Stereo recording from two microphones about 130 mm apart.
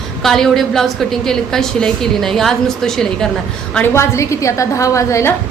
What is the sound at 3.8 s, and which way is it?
A woman's voice, 20° left (ahead or behind).